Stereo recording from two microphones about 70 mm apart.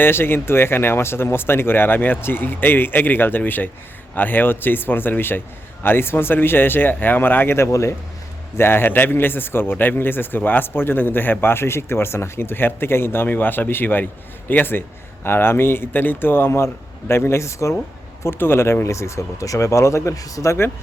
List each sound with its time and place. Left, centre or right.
0.0 s speech: left
8.5 s speech: left
18.2 s speech: left